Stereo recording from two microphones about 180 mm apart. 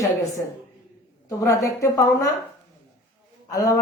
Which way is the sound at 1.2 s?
20° left (ahead or behind).